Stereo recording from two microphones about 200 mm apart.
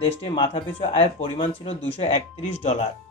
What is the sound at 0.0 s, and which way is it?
A man's voice, 30° left (ahead or behind).